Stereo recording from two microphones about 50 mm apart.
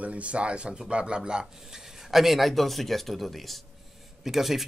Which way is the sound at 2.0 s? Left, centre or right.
Centre.